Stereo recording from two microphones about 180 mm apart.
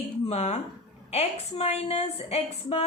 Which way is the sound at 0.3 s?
40° left (ahead or behind).